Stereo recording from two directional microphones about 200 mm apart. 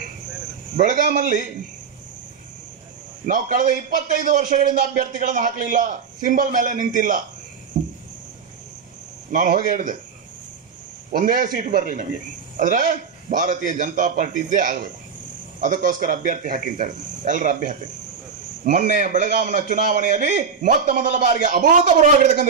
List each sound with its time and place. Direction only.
0.7 s a man's voice: 40° right (ahead or behind)
3.3 s a man's voice: 40° right (ahead or behind)
7.7 s cricket: 40° right (ahead or behind)
9.3 s a man's voice: 40° right (ahead or behind)
11.1 s a man's voice: 45° right (ahead or behind)